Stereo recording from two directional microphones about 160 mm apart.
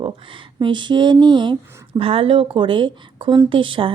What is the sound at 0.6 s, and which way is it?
Speech, 30° right (ahead or behind).